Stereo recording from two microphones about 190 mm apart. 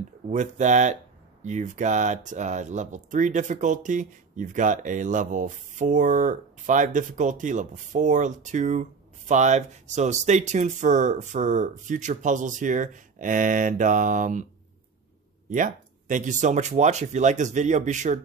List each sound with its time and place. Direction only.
0.3 s speech: 40° right (ahead or behind)
15.5 s speech: 45° right (ahead or behind)